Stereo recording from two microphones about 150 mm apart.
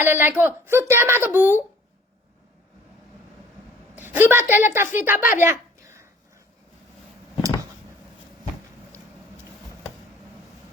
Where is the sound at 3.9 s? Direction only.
15° right (ahead or behind).